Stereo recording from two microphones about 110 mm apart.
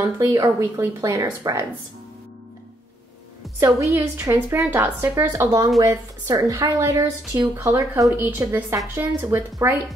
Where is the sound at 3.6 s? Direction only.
30° right (ahead or behind).